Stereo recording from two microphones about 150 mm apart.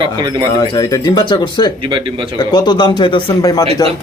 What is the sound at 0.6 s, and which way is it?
A man's voice, 25° left (ahead or behind).